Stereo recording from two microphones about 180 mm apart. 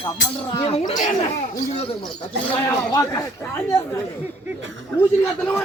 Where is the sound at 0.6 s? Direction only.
30° left (ahead or behind).